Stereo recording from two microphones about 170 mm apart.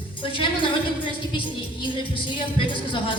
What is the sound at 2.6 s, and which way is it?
Speech, 30° left (ahead or behind).